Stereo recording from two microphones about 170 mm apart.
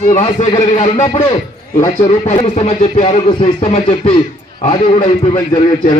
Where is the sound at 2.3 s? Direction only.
40° left (ahead or behind).